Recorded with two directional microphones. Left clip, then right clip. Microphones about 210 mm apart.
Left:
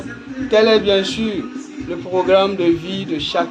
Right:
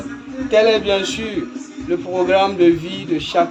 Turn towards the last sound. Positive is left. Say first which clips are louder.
# right 2 dB
turn(degrees=35)  # may be behind; listen again after turning